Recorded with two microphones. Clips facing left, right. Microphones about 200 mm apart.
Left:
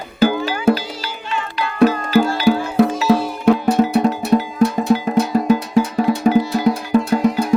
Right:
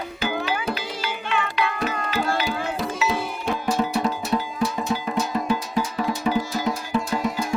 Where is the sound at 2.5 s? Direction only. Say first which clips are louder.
Left 12 dB; 60° left (ahead or behind).